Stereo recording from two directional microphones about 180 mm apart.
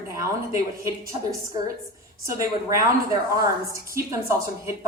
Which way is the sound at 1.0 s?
20° right (ahead or behind).